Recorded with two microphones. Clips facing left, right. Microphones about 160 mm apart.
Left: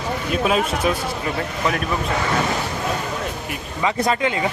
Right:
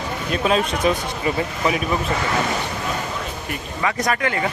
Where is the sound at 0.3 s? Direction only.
5° left (ahead or behind).